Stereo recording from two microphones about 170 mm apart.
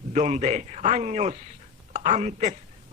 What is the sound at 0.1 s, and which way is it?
Speech, 45° right (ahead or behind).